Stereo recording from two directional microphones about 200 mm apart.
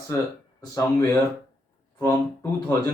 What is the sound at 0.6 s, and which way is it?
Speech, 15° left (ahead or behind).